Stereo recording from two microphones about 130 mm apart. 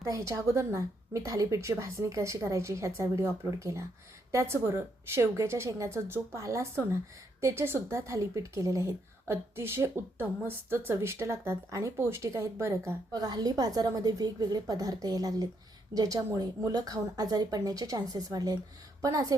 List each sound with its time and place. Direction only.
0.0 s a woman's voice: 20° right (ahead or behind)